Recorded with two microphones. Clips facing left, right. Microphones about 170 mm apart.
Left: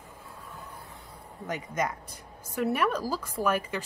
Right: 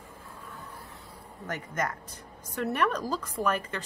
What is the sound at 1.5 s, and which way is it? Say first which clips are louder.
Speech: left 2 dB; 15° left (ahead or behind).